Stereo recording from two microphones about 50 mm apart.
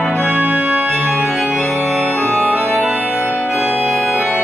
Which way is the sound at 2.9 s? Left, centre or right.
Right.